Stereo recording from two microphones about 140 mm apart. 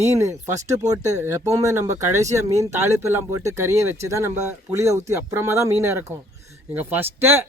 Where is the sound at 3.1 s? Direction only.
20° right (ahead or behind).